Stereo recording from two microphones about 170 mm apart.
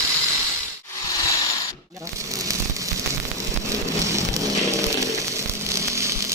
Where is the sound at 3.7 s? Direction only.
15° right (ahead or behind).